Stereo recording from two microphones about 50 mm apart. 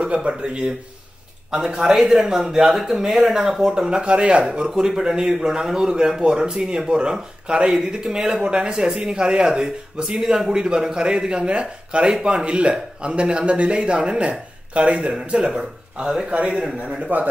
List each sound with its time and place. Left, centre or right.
0.0 s a sound: right
0.3 s speech: centre
2.0 s speech: centre
4.6 s a man's voice: centre